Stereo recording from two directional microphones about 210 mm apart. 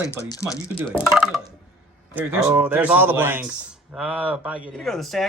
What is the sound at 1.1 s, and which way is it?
Speech, centre (ahead or behind).